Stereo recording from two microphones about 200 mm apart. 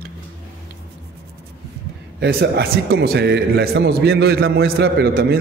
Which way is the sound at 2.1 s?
55° right (ahead or behind).